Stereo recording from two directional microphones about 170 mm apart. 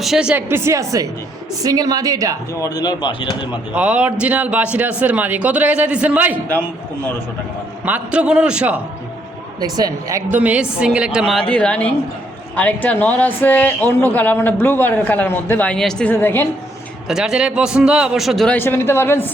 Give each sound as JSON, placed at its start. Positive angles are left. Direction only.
{"t": 0.0, "sound": "a man's voice", "side_deg": -5}
{"t": 2.6, "sound": "speech", "side_deg": 20}
{"t": 3.7, "sound": "a man's voice", "side_deg": -5}
{"t": 7.9, "sound": "a man's voice", "side_deg": -10}
{"t": 9.6, "sound": "a woman's voice", "side_deg": -20}
{"t": 17.1, "sound": "a woman's voice", "side_deg": -5}